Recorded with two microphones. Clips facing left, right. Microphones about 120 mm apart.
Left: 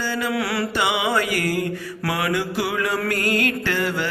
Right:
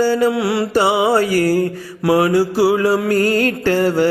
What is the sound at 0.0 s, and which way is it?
Mantra, 40° right (ahead or behind).